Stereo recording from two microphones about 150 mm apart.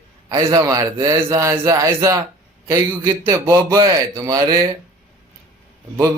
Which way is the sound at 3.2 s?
20° right (ahead or behind).